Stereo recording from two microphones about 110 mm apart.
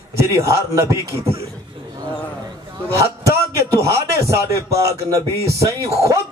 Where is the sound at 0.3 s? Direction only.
30° right (ahead or behind).